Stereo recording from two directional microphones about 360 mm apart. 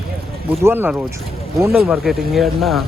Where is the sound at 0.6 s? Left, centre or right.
Centre.